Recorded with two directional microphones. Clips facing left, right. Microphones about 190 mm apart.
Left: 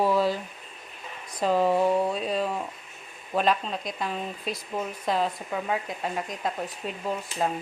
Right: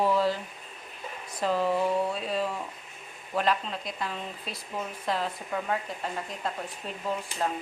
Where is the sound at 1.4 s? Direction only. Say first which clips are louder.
Left 3 dB; 15° left (ahead or behind).